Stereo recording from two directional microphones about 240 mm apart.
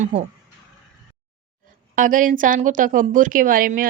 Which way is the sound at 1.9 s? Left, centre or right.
Right.